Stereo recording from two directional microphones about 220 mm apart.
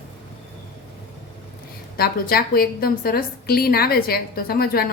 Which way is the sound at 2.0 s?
45° left (ahead or behind).